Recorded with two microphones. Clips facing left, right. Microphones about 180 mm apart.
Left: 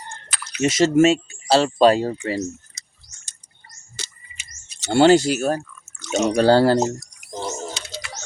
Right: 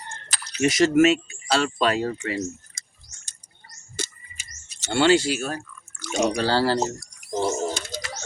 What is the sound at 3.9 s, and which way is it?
Bird, 50° right (ahead or behind).